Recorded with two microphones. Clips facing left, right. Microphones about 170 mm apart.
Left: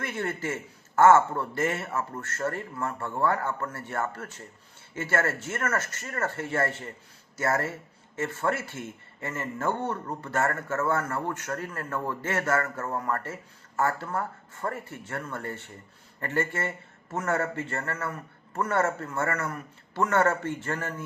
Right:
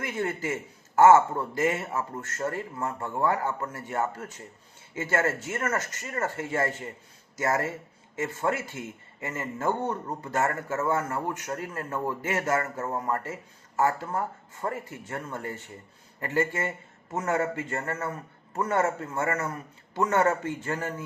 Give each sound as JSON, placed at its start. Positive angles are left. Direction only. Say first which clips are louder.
{"t": 0.0, "sound": "a man's voice", "louder": "right 1 dB", "side_deg": -15}